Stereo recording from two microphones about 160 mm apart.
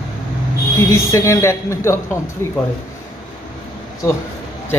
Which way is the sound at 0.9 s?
20° left (ahead or behind).